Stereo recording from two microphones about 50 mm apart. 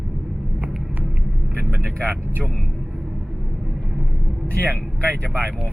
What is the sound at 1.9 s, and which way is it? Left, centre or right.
Speech, left.